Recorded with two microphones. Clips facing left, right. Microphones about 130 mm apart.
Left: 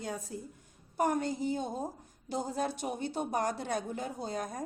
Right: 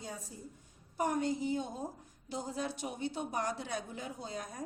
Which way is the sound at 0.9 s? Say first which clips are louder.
Left 2 dB; 45° left (ahead or behind).